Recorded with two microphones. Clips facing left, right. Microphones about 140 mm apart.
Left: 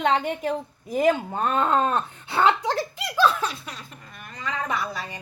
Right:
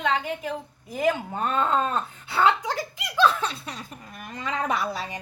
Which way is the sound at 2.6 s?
15° right (ahead or behind).